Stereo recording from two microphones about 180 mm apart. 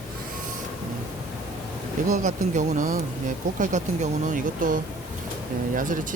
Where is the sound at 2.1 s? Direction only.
45° right (ahead or behind).